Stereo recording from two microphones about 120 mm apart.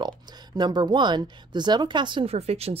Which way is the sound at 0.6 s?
35° right (ahead or behind).